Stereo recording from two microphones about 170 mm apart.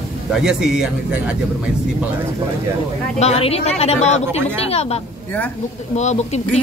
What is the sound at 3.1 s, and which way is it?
Speech, 40° left (ahead or behind).